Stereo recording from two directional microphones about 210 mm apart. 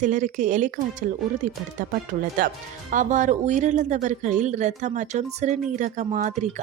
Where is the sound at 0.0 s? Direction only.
35° right (ahead or behind).